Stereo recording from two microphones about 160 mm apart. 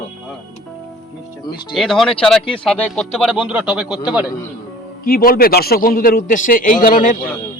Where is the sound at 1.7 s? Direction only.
Centre (ahead or behind).